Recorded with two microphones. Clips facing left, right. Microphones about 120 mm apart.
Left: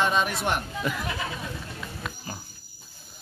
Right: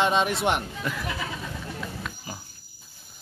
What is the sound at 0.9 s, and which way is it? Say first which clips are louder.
Speech: left 2 dB; 5° left (ahead or behind).